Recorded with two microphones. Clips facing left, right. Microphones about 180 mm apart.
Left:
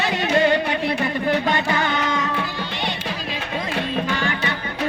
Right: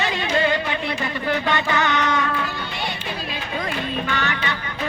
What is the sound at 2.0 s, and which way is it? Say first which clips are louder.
Music: right 1 dB; 25° left (ahead or behind).